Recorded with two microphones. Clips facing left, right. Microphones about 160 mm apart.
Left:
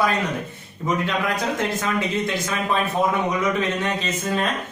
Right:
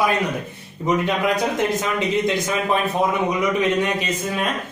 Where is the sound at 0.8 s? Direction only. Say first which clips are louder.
Right 3 dB; 20° right (ahead or behind).